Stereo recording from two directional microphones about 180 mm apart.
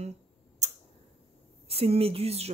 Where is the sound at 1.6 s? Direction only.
30° right (ahead or behind).